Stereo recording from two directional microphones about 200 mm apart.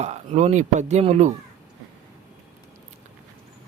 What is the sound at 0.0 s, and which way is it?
Speech, 35° right (ahead or behind).